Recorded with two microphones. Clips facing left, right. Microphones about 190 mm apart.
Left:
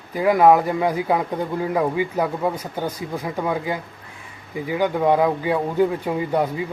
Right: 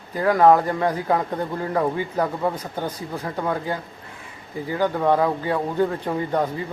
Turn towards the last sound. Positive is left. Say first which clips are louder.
# left 2 dB
turn(degrees=10)  # may be behind; listen again after turning